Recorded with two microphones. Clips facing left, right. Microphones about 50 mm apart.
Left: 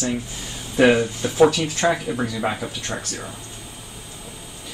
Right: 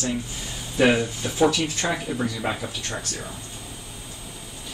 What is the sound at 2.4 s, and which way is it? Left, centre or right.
Speech, centre.